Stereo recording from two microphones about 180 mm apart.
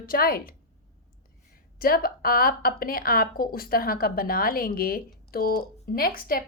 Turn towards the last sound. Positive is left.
turn(degrees=55)  # may be behind; listen again after turning